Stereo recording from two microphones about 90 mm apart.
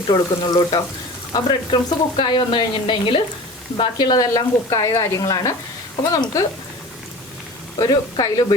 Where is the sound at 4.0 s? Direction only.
50° left (ahead or behind).